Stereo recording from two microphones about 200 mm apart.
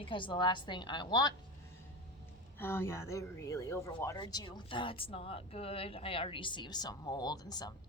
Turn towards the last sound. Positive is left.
turn(degrees=20)  # may be behind; listen again after turning